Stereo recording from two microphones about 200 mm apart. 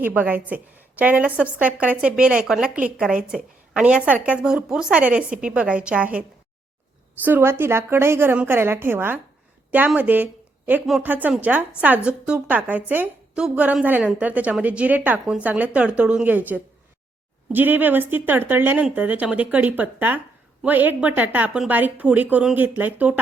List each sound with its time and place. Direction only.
0.0 s a woman's voice: 10° right (ahead or behind)
7.3 s speech: 10° right (ahead or behind)
17.5 s speech: 10° right (ahead or behind)